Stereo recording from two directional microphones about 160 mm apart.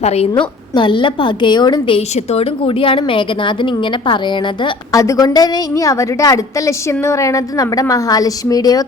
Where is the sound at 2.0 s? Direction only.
40° left (ahead or behind).